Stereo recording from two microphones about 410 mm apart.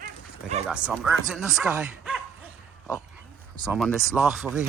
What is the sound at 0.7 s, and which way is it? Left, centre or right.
Speech, centre.